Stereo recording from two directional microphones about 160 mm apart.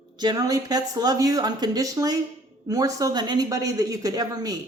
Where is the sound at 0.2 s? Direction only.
25° right (ahead or behind).